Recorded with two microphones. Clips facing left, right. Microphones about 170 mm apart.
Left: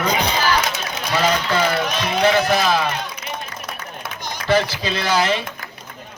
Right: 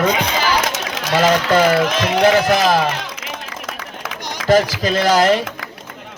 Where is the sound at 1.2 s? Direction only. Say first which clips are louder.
Right 5 dB; 45° right (ahead or behind).